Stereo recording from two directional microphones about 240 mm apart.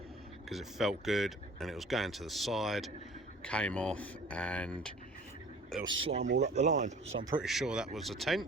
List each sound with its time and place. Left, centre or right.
0.5 s speech: centre
5.8 s speech: right
6.2 s speech: right
6.5 s speech: right
7.4 s speech: centre